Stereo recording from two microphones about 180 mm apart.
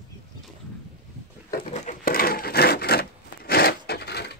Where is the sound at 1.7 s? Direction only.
45° left (ahead or behind).